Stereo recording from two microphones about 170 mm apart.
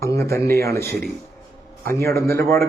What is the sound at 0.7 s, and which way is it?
A man's voice, 15° left (ahead or behind).